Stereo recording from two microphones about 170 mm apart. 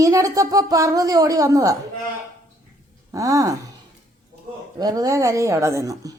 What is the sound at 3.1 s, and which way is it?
Speech, 20° right (ahead or behind).